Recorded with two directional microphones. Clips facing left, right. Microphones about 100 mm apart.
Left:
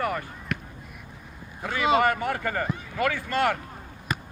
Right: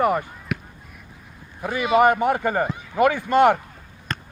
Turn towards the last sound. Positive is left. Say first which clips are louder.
# even
turn(degrees=10)  # may be behind; listen again after turning